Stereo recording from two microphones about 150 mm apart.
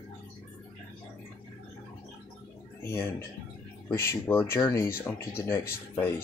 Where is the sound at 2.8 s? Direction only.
15° left (ahead or behind).